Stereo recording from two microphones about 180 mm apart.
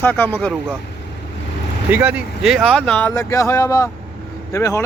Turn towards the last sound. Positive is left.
turn(degrees=15)  # may be behind; listen again after turning